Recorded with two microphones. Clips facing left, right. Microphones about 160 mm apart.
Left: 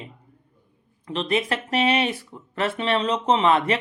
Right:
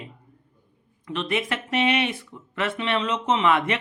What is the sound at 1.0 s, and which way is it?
Speech, 30° left (ahead or behind).